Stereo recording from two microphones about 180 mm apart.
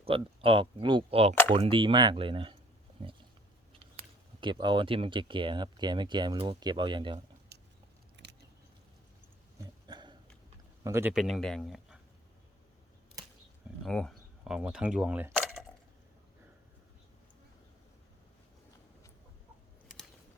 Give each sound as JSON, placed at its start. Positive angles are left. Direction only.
{"t": 0.0, "sound": "speech", "side_deg": -30}
{"t": 4.4, "sound": "speech", "side_deg": -25}
{"t": 7.5, "sound": "biting", "side_deg": -65}
{"t": 9.8, "sound": "a sound", "side_deg": -25}
{"t": 10.8, "sound": "speech", "side_deg": -15}
{"t": 11.1, "sound": "speech", "side_deg": 0}
{"t": 13.8, "sound": "speech", "side_deg": 5}